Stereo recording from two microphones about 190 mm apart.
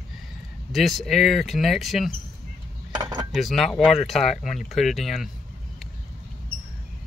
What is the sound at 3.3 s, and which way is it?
Speech, centre (ahead or behind).